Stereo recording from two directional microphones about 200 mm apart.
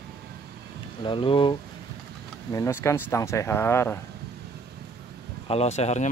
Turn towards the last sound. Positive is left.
turn(degrees=35)  # may be behind; listen again after turning